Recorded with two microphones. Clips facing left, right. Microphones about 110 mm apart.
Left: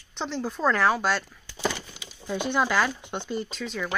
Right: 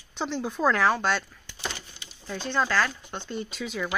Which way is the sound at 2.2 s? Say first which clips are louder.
Left 2 dB; 15° left (ahead or behind).